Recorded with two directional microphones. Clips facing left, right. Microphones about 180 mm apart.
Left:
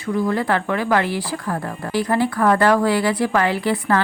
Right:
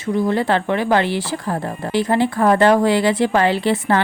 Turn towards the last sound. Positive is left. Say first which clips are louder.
# right 2 dB
turn(degrees=-25)  # may be behind; listen again after turning